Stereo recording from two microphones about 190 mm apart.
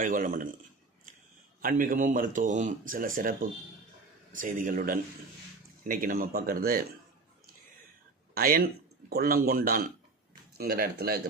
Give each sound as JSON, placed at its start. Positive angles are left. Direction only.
{"t": 0.0, "sound": "speech", "side_deg": -45}
{"t": 1.6, "sound": "speech", "side_deg": -45}
{"t": 8.4, "sound": "speech", "side_deg": -50}